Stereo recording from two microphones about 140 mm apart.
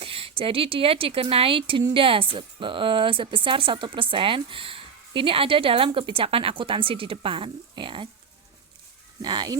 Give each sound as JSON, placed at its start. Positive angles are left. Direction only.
{"t": 0.0, "sound": "a woman's voice", "side_deg": -40}
{"t": 9.2, "sound": "speech", "side_deg": -30}